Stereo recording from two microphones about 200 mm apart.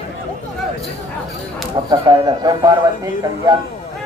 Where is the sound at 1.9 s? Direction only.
20° right (ahead or behind).